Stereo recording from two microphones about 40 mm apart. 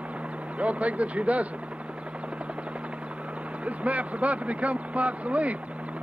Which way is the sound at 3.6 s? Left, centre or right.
Right.